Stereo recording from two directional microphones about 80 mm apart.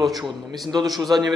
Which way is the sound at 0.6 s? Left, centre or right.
Right.